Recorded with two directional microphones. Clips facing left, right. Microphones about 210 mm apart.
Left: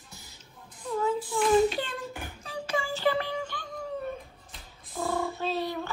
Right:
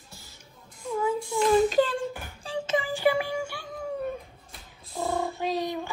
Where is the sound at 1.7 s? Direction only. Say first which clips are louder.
Right 10 dB; 35° right (ahead or behind); by 3.6 s 10° right (ahead or behind).